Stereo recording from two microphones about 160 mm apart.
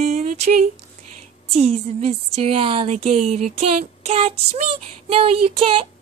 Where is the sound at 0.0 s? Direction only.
50° right (ahead or behind).